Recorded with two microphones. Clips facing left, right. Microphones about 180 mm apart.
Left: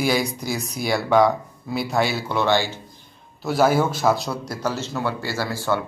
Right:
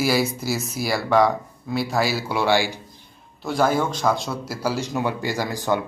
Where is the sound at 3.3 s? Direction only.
5° left (ahead or behind); by 5.8 s 15° right (ahead or behind).